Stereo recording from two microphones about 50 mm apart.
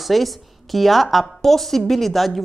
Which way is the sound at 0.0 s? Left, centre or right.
Centre.